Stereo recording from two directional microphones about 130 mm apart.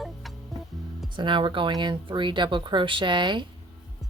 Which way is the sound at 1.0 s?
40° right (ahead or behind).